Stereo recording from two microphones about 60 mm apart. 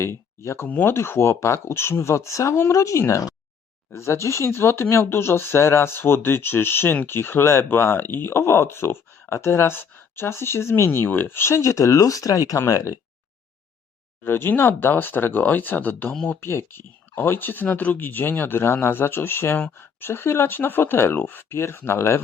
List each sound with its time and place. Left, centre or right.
0.0 s speech: left
3.9 s speech: left
12.6 s speech: left
14.3 s speech: left
16.4 s speech: left